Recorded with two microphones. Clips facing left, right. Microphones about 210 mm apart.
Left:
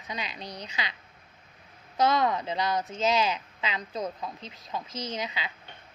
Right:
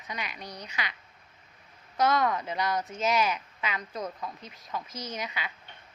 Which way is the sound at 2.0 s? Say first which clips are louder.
Left 1 dB; 25° left (ahead or behind).